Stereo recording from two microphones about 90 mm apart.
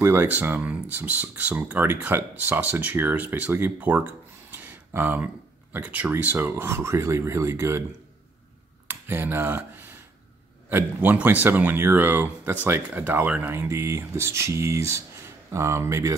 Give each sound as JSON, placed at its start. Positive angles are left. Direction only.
{"t": 0.0, "sound": "speech", "side_deg": -25}
{"t": 8.8, "sound": "a sound", "side_deg": -25}
{"t": 10.7, "sound": "speech", "side_deg": -20}